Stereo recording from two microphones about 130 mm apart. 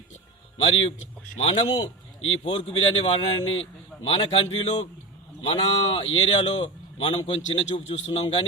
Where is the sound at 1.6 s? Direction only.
30° left (ahead or behind).